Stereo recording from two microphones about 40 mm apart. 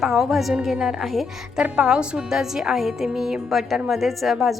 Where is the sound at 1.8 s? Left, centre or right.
Centre.